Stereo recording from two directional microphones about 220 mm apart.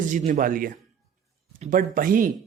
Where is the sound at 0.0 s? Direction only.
35° right (ahead or behind).